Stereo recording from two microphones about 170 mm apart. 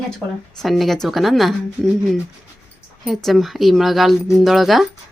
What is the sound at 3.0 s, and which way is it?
A woman's voice, centre (ahead or behind).